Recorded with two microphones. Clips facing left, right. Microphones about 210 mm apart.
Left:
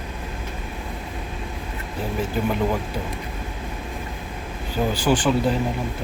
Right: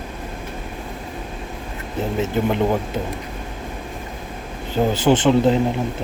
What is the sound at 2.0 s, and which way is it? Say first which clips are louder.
Speech: right 4 dB; 25° right (ahead or behind).